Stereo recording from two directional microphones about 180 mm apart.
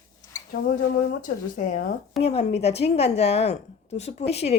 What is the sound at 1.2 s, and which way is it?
Speech, 45° left (ahead or behind).